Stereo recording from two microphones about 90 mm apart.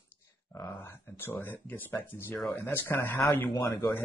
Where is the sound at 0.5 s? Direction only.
25° left (ahead or behind).